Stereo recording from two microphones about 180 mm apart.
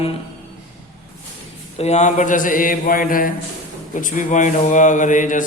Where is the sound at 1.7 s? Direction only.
40° left (ahead or behind).